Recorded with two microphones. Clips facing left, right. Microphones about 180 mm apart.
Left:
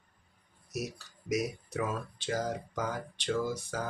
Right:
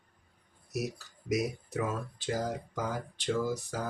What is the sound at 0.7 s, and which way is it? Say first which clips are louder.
Speech: right 2 dB; centre (ahead or behind).